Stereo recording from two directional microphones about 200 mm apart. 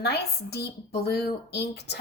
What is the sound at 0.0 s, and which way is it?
A woman's voice, 55° left (ahead or behind).